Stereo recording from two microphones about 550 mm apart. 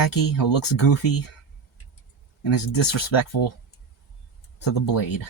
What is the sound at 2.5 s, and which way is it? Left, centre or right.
Speech, left.